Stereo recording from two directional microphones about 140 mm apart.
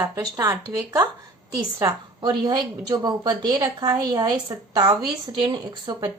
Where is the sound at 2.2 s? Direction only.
30° right (ahead or behind).